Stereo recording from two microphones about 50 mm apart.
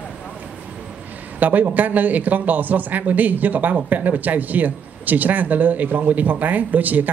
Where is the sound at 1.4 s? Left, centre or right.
Right.